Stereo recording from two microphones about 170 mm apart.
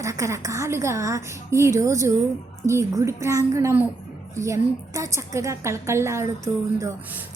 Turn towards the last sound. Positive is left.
turn(degrees=-20)  # may be behind; listen again after turning